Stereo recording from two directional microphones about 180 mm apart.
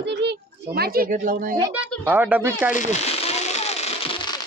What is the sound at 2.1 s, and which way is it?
Speech, 10° right (ahead or behind).